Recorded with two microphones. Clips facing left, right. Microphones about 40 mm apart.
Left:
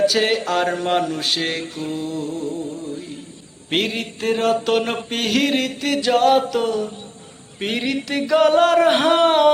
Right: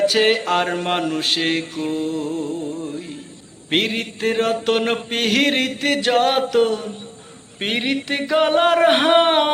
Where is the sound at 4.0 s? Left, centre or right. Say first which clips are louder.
Right 1 dB; right.